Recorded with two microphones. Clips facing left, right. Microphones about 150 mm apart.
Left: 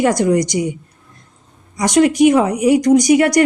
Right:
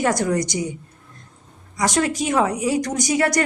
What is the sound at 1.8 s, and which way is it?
Speech, 20° left (ahead or behind).